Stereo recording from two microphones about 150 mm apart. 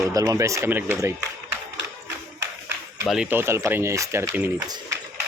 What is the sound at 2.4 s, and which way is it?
Clapping, 15° right (ahead or behind).